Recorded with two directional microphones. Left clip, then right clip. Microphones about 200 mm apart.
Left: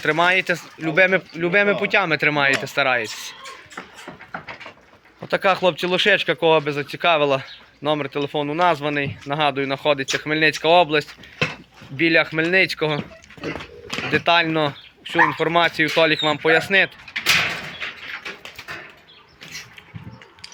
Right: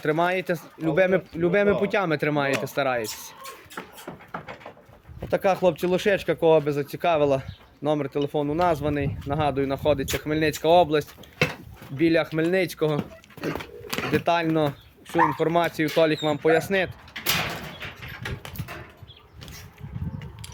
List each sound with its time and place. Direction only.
0.0 s speech: 5° right (ahead or behind)
5.3 s speech: 5° right (ahead or behind)
13.9 s a sound: centre (ahead or behind)
14.3 s speech: 10° right (ahead or behind)
17.2 s sliding door: 20° right (ahead or behind)